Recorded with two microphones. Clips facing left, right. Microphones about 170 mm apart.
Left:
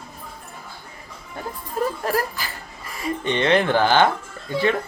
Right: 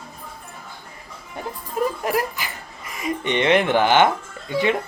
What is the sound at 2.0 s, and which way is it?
Speech, 15° right (ahead or behind).